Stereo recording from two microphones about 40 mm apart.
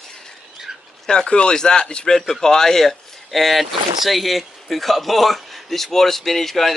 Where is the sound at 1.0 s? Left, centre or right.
Left.